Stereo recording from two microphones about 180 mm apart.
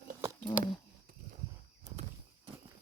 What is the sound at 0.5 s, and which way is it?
Speech, 25° left (ahead or behind).